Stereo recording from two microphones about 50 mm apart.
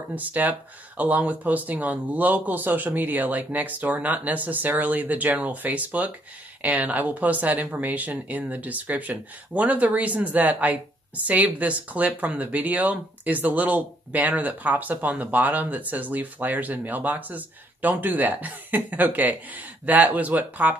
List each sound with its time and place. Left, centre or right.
0.1 s speech: right